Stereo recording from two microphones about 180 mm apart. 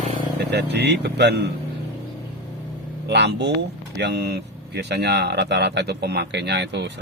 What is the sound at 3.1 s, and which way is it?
Speech, 70° right (ahead or behind).